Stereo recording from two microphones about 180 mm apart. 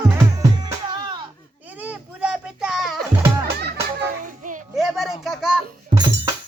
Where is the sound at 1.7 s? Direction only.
10° right (ahead or behind).